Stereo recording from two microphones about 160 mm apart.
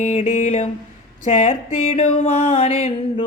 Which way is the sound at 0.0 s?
45° left (ahead or behind).